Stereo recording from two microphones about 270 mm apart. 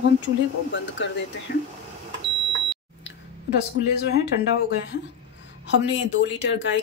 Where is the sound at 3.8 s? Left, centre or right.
Left.